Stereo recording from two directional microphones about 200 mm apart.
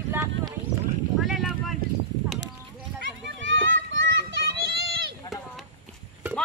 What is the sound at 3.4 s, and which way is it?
Children playing, 70° right (ahead or behind).